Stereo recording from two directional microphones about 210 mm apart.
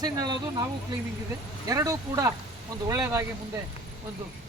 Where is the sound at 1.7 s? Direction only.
15° right (ahead or behind).